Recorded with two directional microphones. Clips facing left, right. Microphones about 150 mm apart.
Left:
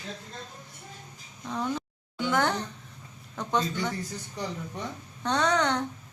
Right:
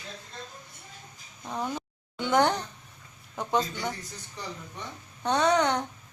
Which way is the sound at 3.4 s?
10° right (ahead or behind).